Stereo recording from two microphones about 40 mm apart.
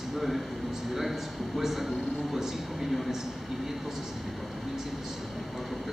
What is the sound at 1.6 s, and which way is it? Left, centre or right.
Speech, centre.